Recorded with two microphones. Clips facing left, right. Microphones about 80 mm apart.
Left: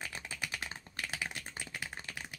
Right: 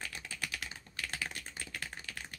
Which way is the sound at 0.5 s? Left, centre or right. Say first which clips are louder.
Left 2 dB; left.